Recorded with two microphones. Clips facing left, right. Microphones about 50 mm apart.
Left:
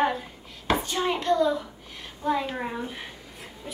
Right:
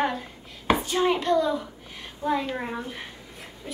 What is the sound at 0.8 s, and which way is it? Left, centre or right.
A woman's voice, centre.